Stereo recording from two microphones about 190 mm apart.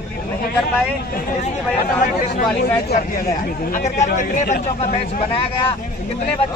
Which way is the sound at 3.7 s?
40° left (ahead or behind).